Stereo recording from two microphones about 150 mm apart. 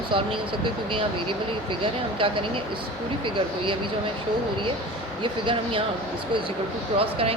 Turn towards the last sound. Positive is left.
turn(degrees=-40)  # may be behind; listen again after turning